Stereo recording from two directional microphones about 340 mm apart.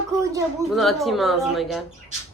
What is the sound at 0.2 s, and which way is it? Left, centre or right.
Speech, centre.